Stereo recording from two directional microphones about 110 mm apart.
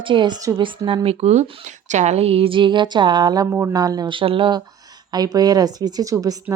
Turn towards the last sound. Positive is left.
turn(degrees=-35)  # may be behind; listen again after turning